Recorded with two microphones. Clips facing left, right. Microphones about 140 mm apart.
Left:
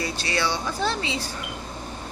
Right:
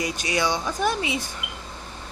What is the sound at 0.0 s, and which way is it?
Speech, 15° right (ahead or behind).